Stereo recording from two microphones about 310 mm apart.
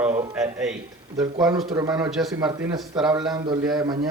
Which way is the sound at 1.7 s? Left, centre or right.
Centre.